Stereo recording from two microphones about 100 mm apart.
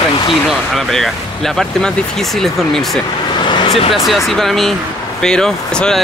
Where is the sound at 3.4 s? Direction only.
50° left (ahead or behind).